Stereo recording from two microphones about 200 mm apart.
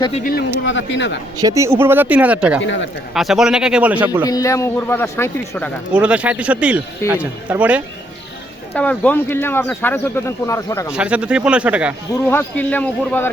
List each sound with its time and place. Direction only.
0.6 s speech: 65° left (ahead or behind)
1.4 s speech: 15° right (ahead or behind)
2.6 s speech: 65° left (ahead or behind)
3.2 s a man's voice: centre (ahead or behind)
4.3 s speech: 15° left (ahead or behind)
5.9 s a man's voice: 5° right (ahead or behind)
8.7 s speech: 5° left (ahead or behind)
10.9 s a man's voice: 5° right (ahead or behind)
12.3 s speech: 10° left (ahead or behind)